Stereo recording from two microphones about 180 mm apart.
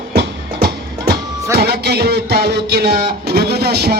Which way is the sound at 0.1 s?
65° right (ahead or behind).